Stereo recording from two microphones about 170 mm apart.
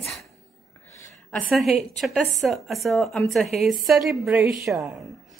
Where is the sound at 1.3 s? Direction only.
Centre (ahead or behind).